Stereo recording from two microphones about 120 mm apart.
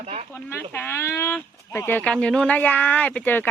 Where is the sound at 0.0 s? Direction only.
60° right (ahead or behind).